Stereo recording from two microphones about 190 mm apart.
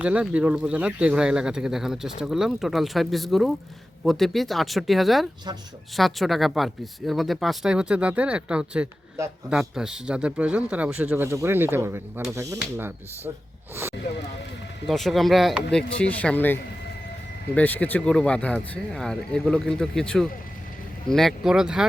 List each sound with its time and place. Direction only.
0.0 s a man's voice: 5° right (ahead or behind)
14.8 s speech: centre (ahead or behind)